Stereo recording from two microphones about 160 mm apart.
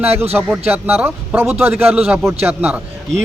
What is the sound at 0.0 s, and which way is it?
A man's voice, 10° right (ahead or behind).